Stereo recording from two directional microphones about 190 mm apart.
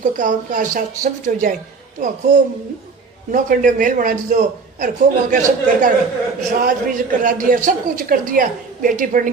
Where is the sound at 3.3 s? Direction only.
45° right (ahead or behind).